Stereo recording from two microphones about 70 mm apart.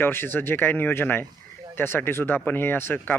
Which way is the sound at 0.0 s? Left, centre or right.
Left.